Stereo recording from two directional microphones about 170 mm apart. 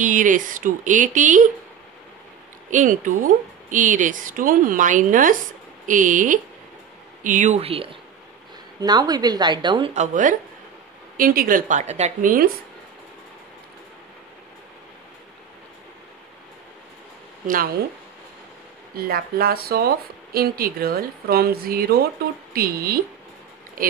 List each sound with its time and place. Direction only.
0.0 s speech: 50° right (ahead or behind)
2.7 s speech: 50° right (ahead or behind); by 8.0 s 35° right (ahead or behind)
8.7 s a woman's voice: 25° right (ahead or behind)
9.9 s speech: 50° right (ahead or behind)
18.9 s speech: 60° right (ahead or behind)